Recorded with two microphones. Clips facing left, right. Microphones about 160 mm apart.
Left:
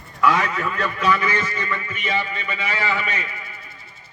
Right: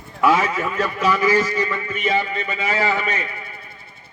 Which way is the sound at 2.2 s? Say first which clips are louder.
Right 3 dB; 40° right (ahead or behind).